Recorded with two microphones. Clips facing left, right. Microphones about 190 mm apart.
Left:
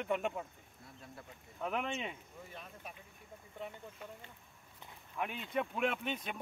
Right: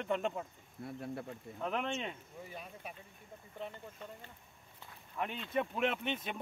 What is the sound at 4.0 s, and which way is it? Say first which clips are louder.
Speech: right 1 dB; 5° left (ahead or behind).